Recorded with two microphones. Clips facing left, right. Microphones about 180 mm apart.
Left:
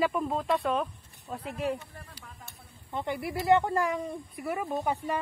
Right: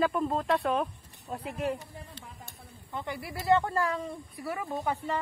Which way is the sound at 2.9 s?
20° left (ahead or behind).